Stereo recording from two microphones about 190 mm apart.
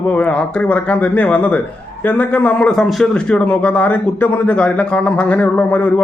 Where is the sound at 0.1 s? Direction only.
5° left (ahead or behind).